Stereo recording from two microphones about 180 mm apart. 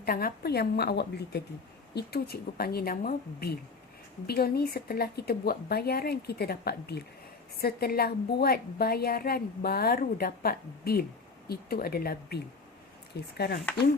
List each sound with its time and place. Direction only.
0.0 s a woman's voice: 55° left (ahead or behind)